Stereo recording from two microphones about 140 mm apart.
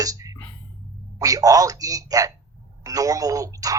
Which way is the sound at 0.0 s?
25° right (ahead or behind).